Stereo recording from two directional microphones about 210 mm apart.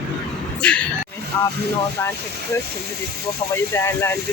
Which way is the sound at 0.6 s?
5° left (ahead or behind).